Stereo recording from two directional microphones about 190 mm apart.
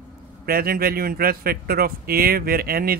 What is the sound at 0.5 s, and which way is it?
A man's voice, 50° right (ahead or behind).